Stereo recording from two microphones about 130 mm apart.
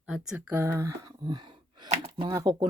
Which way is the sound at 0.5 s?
20° right (ahead or behind).